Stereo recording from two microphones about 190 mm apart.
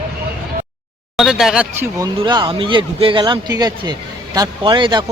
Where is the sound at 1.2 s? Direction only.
Centre (ahead or behind).